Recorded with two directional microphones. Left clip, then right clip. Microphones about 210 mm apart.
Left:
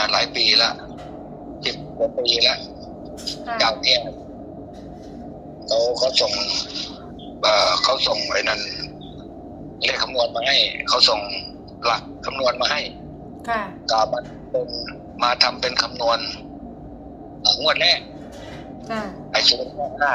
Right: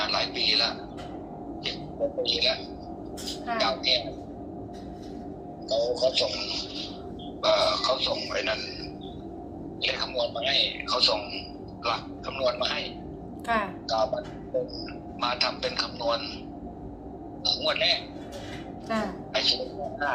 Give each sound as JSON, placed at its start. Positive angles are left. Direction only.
{"t": 0.0, "sound": "a sound", "side_deg": 50}
{"t": 1.6, "sound": "a man's voice", "side_deg": 50}
{"t": 3.6, "sound": "a man's voice", "side_deg": 50}
{"t": 5.6, "sound": "a man's voice", "side_deg": 50}
{"t": 13.5, "sound": "a woman's voice", "side_deg": 5}
{"t": 13.8, "sound": "a man's voice", "side_deg": 50}
{"t": 17.4, "sound": "a man's voice", "side_deg": 50}
{"t": 19.3, "sound": "a woman's voice", "side_deg": 50}